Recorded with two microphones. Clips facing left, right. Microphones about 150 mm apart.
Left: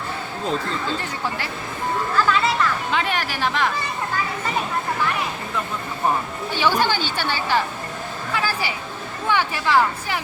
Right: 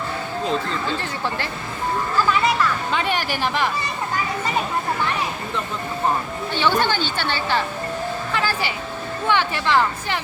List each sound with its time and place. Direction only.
2.1 s music: 20° right (ahead or behind)
2.9 s speech: centre (ahead or behind)
6.5 s a woman's voice: 10° left (ahead or behind)
9.3 s a woman's voice: 10° left (ahead or behind)